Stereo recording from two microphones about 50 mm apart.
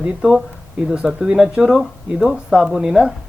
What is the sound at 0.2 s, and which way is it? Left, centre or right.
Speech, centre.